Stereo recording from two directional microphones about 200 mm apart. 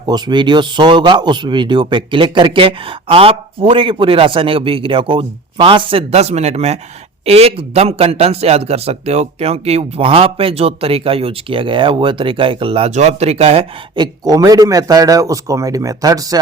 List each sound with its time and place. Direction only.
0.0 s speech: 20° right (ahead or behind)